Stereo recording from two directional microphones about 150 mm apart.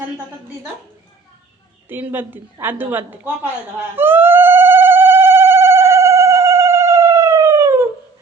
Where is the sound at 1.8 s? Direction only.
15° right (ahead or behind).